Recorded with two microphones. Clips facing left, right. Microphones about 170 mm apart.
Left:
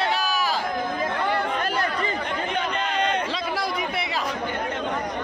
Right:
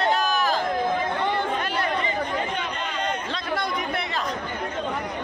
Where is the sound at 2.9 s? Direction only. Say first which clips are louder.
Left 5 dB; 65° left (ahead or behind).